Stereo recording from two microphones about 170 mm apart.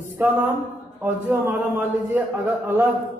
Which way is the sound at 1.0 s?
10° right (ahead or behind).